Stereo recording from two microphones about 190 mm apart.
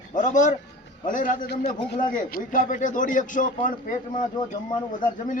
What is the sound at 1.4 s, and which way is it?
Speech, 60° left (ahead or behind).